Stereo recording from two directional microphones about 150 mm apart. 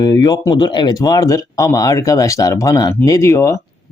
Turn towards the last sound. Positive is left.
turn(degrees=20)  # may be behind; listen again after turning